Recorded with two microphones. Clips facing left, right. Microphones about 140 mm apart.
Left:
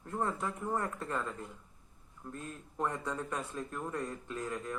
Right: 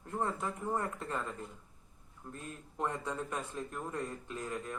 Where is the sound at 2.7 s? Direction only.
20° right (ahead or behind).